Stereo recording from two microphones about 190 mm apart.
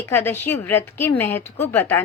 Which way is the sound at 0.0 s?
10° left (ahead or behind).